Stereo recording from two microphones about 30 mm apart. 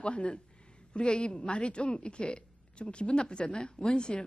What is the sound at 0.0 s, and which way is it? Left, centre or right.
A woman's voice, left.